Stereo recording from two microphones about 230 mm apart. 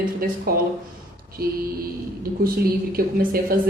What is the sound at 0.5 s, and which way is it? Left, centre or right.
A woman's voice, right.